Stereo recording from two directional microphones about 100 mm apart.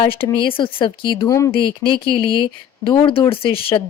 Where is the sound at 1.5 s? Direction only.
55° left (ahead or behind).